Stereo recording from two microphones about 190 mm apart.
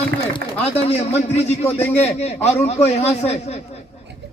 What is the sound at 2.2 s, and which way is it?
A man's voice, 35° left (ahead or behind).